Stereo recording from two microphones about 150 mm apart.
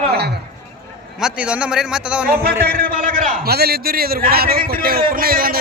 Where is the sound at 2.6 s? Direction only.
85° right.